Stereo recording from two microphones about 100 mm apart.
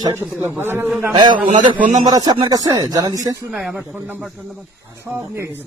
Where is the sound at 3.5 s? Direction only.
5° right (ahead or behind).